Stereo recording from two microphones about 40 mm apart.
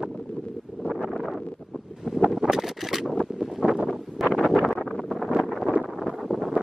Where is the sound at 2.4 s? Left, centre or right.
Centre.